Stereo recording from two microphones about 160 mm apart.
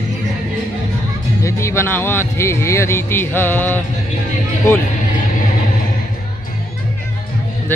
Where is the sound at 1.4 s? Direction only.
15° left (ahead or behind).